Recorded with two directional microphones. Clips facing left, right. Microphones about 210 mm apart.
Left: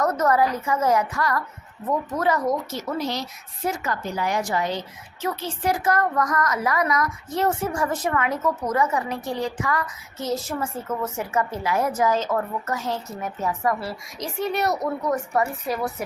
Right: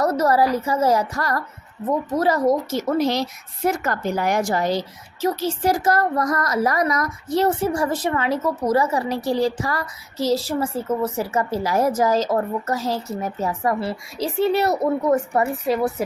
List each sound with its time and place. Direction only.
0.0 s a woman's voice: 35° right (ahead or behind)
3.0 s a woman's voice: 85° right
3.8 s a woman's voice: 55° right (ahead or behind); by 14.3 s 30° right (ahead or behind)
14.8 s a woman's voice: 20° right (ahead or behind)